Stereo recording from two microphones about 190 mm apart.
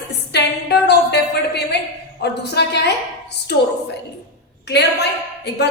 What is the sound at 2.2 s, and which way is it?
Speech, 60° left (ahead or behind).